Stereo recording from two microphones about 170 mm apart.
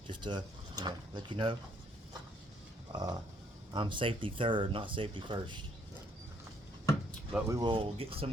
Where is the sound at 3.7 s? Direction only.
30° right (ahead or behind).